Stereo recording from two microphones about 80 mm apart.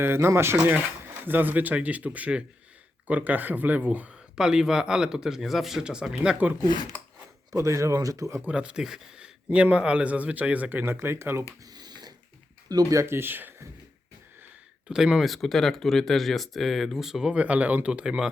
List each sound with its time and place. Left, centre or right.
0.0 s speech: right
4.4 s speech: centre
6.6 s speech: left
7.5 s speech: right
8.4 s speech: centre; by 11.4 s right
11.6 s a sound: right
12.6 s speech: right
14.8 s speech: centre